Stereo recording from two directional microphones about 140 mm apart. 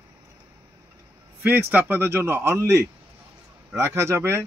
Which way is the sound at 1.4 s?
15° right (ahead or behind).